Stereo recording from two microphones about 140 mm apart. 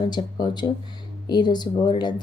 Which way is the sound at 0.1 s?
30° left (ahead or behind).